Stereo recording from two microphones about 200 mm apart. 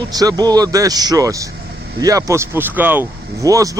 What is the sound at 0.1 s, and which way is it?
A man's voice, 20° right (ahead or behind).